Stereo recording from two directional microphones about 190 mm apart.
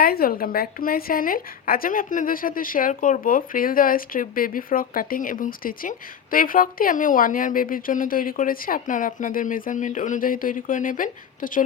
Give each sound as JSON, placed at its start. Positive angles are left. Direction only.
{"t": 0.0, "sound": "a woman's voice", "side_deg": 50}